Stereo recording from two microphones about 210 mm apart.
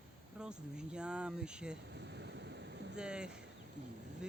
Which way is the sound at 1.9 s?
55° right (ahead or behind).